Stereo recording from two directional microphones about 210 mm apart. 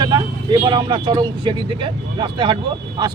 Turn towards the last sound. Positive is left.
turn(degrees=-20)  # may be behind; listen again after turning